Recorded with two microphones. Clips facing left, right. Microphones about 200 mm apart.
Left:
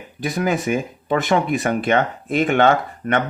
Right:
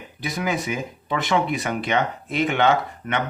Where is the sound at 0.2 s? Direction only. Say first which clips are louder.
Left 5 dB; 50° left (ahead or behind).